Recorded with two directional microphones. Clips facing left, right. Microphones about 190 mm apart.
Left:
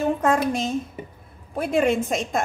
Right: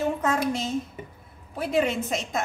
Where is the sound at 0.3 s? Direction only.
55° left (ahead or behind).